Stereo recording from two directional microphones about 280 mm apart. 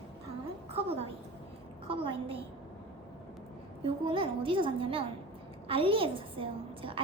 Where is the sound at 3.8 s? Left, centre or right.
Centre.